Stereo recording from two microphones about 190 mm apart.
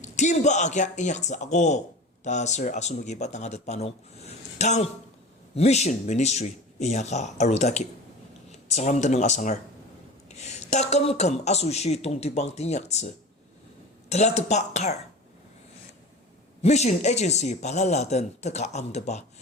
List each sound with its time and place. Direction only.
0.0 s a woman's voice: 40° left (ahead or behind)
14.1 s a woman's voice: 35° left (ahead or behind)
16.6 s a woman's voice: 35° left (ahead or behind)